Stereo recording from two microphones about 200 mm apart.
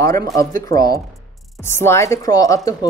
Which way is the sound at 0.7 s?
15° left (ahead or behind).